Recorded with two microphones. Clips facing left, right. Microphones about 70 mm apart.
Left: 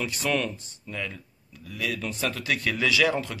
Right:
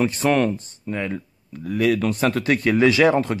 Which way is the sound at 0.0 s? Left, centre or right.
Right.